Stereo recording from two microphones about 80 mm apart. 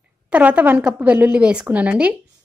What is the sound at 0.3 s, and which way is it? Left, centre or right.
A woman's voice, centre.